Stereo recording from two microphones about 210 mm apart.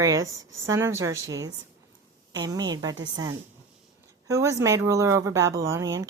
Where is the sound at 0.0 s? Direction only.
15° right (ahead or behind).